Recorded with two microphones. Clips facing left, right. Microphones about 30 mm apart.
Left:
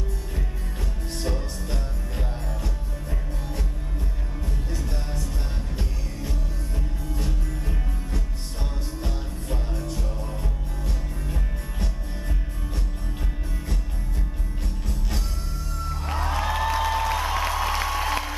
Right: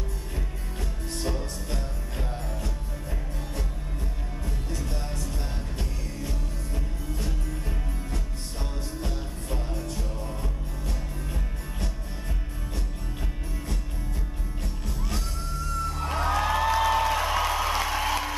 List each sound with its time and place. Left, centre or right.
1.1 s music: centre
14.9 s music: centre
16.0 s applause: centre